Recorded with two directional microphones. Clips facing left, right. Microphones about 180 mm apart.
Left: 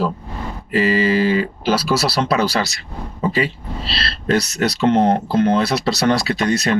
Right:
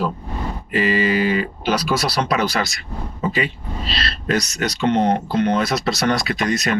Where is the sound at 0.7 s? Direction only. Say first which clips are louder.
Left 3 dB; 35° left (ahead or behind).